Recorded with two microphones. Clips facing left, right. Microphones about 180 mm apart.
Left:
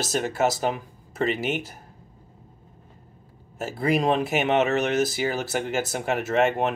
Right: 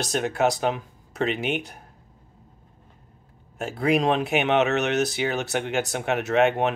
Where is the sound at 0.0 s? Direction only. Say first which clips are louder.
Right 1 dB; centre (ahead or behind).